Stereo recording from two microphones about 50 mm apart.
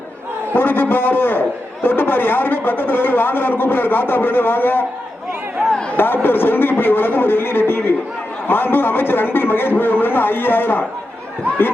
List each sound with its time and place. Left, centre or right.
0.5 s a man's voice: left
6.2 s a man's voice: left